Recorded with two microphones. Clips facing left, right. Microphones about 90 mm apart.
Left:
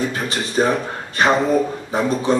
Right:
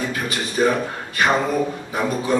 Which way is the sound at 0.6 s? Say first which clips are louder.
Left 1 dB; 25° left (ahead or behind).